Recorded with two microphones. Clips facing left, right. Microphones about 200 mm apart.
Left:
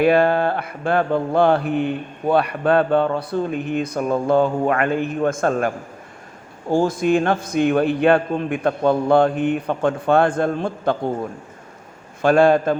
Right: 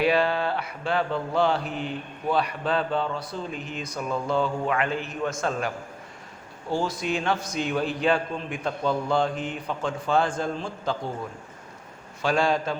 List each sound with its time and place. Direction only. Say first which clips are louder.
0.0 s mantra: left 7 dB; 50° left (ahead or behind)